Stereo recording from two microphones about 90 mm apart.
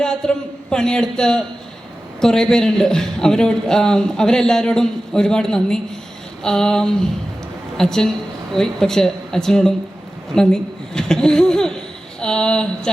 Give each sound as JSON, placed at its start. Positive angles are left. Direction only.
{"t": 0.0, "sound": "a man's voice", "side_deg": 10}